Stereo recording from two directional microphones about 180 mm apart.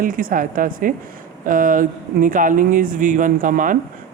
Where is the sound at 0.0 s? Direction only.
50° right (ahead or behind).